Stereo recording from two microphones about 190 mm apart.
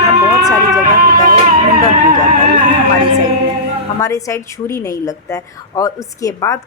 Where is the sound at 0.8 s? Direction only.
50° right (ahead or behind).